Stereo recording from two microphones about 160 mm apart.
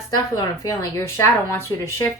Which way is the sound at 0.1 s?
20° left (ahead or behind).